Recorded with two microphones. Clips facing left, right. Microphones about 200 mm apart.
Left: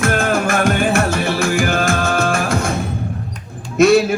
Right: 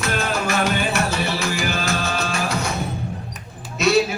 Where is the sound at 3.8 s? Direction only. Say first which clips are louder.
Left 9 dB; 50° left (ahead or behind).